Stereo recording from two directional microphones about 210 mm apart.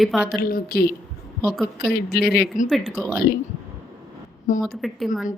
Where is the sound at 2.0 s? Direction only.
50° left (ahead or behind).